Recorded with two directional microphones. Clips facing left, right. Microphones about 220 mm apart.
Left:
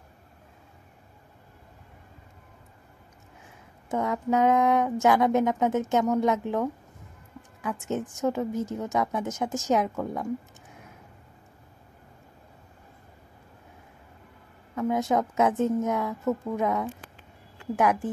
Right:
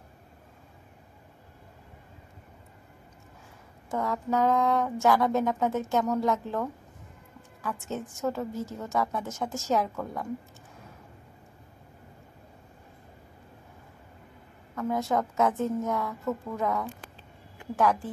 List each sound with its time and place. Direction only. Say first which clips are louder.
3.9 s a woman's voice: left 3 dB; 20° left (ahead or behind)
14.8 s speech: left 3 dB; 20° left (ahead or behind)